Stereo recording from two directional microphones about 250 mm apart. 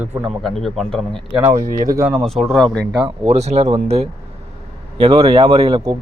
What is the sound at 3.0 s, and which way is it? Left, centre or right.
Speech, right.